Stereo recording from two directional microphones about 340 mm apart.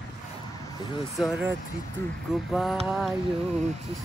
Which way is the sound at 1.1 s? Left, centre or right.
Centre.